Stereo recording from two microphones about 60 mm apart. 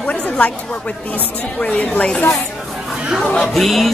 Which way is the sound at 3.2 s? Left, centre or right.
Centre.